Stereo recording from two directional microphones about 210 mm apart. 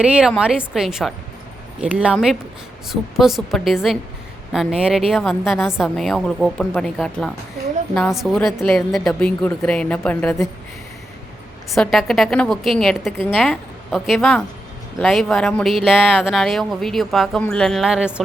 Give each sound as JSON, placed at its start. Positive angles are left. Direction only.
{"t": 0.0, "sound": "speech", "side_deg": -5}
{"t": 11.7, "sound": "speech", "side_deg": 0}